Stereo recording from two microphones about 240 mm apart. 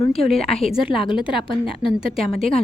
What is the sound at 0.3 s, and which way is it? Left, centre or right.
A woman's voice, centre.